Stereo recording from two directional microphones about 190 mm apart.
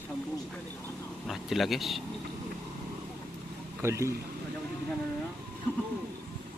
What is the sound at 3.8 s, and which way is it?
Speech, 15° right (ahead or behind).